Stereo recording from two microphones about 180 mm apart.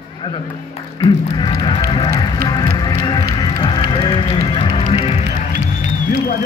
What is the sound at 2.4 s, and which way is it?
Music, 20° left (ahead or behind).